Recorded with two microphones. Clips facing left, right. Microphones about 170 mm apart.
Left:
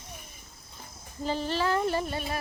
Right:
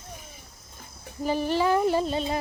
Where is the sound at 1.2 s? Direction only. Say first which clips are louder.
Right 5 dB; 15° right (ahead or behind).